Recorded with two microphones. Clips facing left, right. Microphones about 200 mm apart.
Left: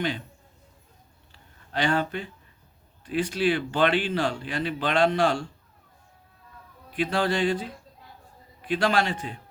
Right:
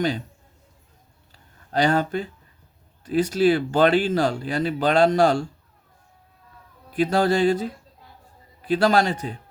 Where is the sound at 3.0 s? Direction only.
40° right (ahead or behind).